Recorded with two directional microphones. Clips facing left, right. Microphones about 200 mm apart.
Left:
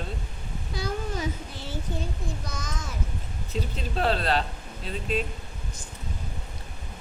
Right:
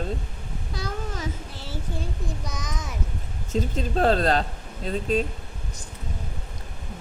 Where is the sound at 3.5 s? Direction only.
45° right (ahead or behind).